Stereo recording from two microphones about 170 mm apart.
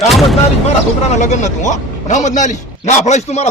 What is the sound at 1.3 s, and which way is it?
A man's voice, 45° left (ahead or behind).